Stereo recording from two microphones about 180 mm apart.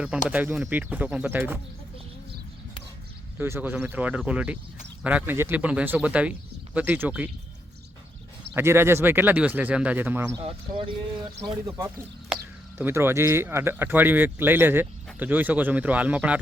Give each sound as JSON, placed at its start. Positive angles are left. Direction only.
{"t": 0.3, "sound": "speech", "side_deg": -10}
{"t": 3.3, "sound": "speech", "side_deg": -10}
{"t": 8.5, "sound": "speech", "side_deg": -15}
{"t": 10.3, "sound": "speech", "side_deg": -30}
{"t": 12.8, "sound": "speech", "side_deg": -15}